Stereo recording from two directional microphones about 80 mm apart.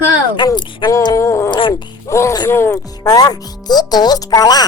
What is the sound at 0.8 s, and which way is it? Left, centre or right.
Speech, left.